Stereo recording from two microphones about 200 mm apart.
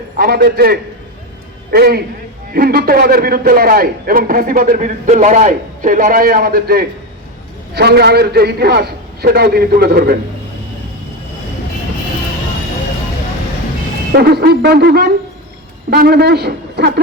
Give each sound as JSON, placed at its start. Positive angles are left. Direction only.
{"t": 0.2, "sound": "a man's voice", "side_deg": -50}
{"t": 14.1, "sound": "a man's voice", "side_deg": -50}